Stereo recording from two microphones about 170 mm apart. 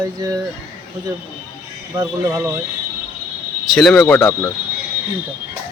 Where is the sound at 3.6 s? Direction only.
Centre (ahead or behind).